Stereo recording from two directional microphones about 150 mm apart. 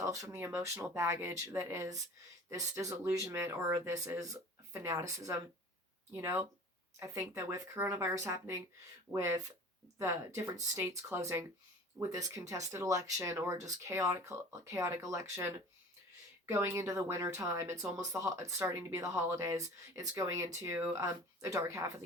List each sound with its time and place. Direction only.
0.0 s speech: 20° right (ahead or behind)